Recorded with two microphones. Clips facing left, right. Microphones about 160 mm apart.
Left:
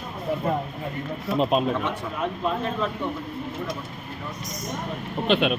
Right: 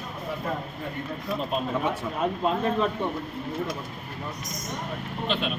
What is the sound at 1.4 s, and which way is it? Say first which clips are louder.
Speech: left 9 dB; 90° left.